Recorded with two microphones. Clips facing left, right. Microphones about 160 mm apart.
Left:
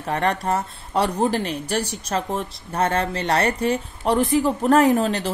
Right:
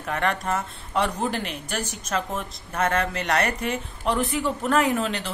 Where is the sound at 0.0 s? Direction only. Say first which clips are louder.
Left 3 dB; 35° left (ahead or behind).